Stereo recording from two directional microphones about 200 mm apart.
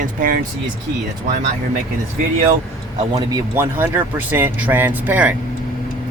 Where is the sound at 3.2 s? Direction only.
15° right (ahead or behind).